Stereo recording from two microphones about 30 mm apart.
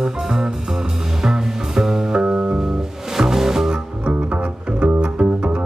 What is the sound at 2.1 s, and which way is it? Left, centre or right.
Music, right.